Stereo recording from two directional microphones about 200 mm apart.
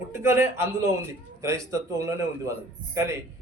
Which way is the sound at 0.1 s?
15° right (ahead or behind).